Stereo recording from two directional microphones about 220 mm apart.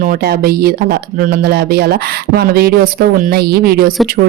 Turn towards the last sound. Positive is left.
turn(degrees=-45)  # may be behind; listen again after turning